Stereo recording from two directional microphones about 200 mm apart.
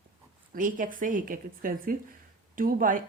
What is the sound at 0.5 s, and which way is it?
Speech, 40° right (ahead or behind).